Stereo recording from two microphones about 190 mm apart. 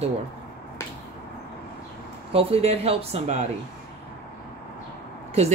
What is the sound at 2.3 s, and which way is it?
Speech, 30° right (ahead or behind).